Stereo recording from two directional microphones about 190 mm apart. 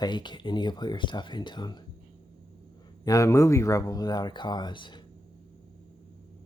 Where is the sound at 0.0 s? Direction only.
25° left (ahead or behind).